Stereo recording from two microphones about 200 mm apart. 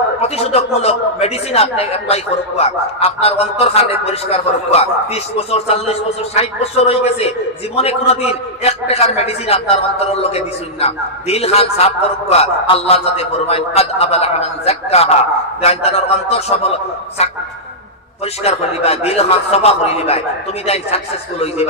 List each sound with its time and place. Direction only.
0.2 s a man's voice: 30° left (ahead or behind)
18.4 s a man's voice: 30° left (ahead or behind)